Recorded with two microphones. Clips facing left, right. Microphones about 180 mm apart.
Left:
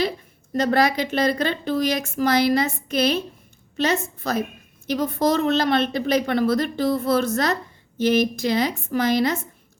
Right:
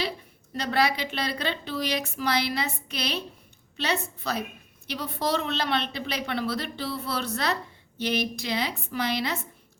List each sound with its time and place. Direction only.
0.5 s a woman's voice: 45° left (ahead or behind)